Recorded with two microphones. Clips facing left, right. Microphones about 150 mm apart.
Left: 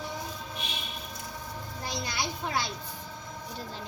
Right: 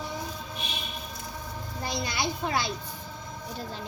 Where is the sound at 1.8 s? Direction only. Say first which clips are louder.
Right 4 dB; 65° right (ahead or behind).